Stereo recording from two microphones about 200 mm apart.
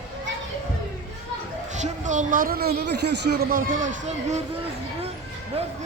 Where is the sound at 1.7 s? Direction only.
35° right (ahead or behind).